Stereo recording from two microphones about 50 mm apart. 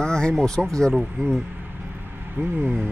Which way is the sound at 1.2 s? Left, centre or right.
Right.